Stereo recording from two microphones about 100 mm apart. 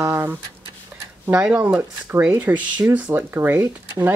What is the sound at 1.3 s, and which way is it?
Speech, 15° right (ahead or behind).